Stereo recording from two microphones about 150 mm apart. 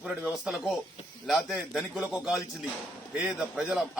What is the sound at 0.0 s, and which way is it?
A man's voice, 5° right (ahead or behind).